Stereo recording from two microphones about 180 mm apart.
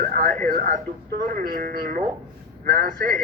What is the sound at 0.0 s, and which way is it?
A man's voice, 50° right (ahead or behind).